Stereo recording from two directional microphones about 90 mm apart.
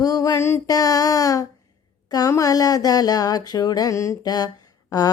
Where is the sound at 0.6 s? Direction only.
40° left (ahead or behind).